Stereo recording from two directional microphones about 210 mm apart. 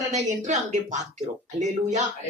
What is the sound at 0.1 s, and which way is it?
Speech, 35° right (ahead or behind).